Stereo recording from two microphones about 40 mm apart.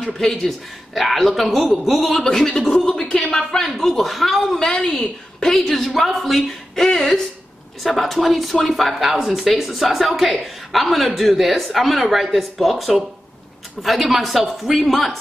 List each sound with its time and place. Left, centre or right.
0.0 s a man's voice: centre
2.9 s a man's voice: centre
4.6 s a man's voice: centre
5.5 s a man's voice: centre
8.9 s a man's voice: centre